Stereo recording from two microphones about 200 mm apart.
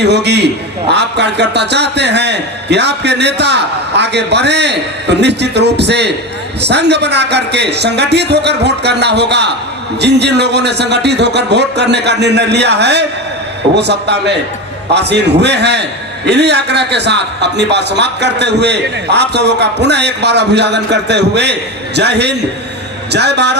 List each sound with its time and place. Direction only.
0.0 s a man's voice: 55° right (ahead or behind)